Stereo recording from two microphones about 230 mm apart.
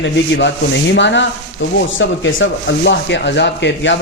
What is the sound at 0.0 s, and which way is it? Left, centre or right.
Speech, left.